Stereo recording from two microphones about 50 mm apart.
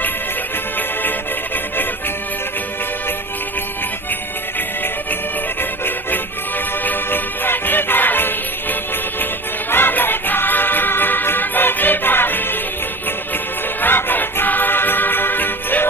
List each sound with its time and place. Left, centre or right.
5.6 s music: left
13.7 s music: left